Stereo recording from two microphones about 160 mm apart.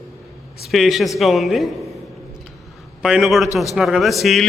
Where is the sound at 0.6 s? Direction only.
Centre (ahead or behind).